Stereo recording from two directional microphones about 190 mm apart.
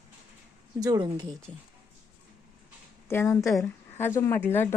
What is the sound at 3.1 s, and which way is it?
Speech, 15° left (ahead or behind).